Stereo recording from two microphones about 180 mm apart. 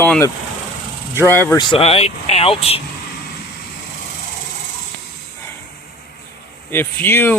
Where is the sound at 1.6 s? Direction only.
30° left (ahead or behind).